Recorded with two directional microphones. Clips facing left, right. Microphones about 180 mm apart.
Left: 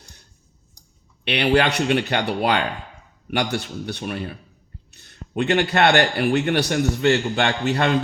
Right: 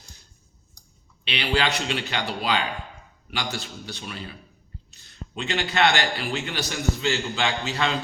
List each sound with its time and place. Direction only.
1.2 s a man's voice: 60° left (ahead or behind)